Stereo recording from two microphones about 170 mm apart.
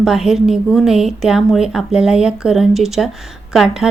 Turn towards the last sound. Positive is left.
turn(degrees=0)  # may be behind; listen again after turning